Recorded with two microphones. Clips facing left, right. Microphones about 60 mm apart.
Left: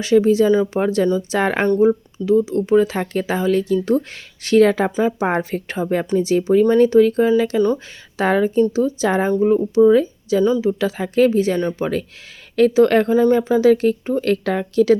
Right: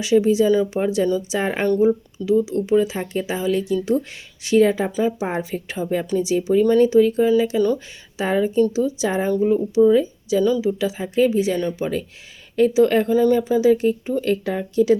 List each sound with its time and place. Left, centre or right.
0.0 s speech: left
1.4 s speech: left
1.6 s a woman's voice: left
1.9 s speech: left
9.2 s speech: left
9.7 s speech: left
10.4 s a woman's voice: left
10.7 s speech: left
13.1 s speech: left